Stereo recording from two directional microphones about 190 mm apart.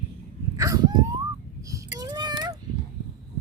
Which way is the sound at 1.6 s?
15° right (ahead or behind).